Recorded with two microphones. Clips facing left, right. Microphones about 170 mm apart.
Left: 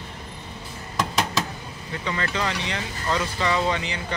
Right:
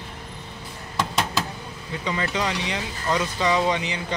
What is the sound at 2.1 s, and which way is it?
Speech, 15° right (ahead or behind).